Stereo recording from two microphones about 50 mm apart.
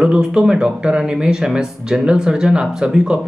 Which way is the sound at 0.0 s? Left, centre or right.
Centre.